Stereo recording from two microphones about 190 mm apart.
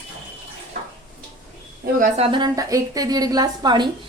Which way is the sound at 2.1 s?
30° right (ahead or behind).